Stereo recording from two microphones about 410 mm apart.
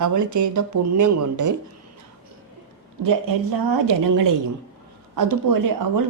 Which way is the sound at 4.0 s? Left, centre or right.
Right.